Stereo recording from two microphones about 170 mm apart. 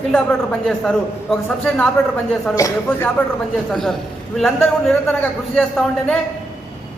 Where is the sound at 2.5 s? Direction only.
15° left (ahead or behind).